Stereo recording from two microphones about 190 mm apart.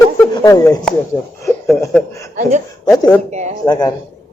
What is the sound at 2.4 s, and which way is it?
Speech, 40° right (ahead or behind).